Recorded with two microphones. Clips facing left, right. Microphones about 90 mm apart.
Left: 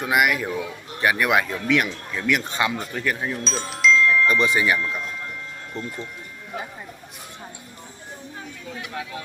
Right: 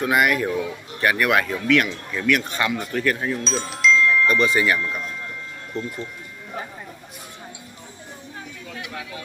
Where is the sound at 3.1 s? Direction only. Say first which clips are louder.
Right 2 dB; 5° left (ahead or behind).